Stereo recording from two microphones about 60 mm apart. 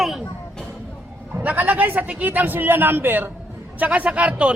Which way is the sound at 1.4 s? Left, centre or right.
Right.